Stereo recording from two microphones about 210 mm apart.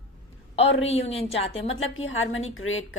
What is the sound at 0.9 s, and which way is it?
Speech, 30° left (ahead or behind).